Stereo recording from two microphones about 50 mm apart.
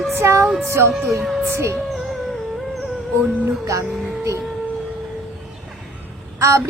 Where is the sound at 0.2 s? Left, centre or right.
Right.